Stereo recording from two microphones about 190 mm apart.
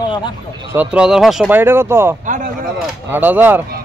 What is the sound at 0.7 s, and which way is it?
Speech, 5° right (ahead or behind).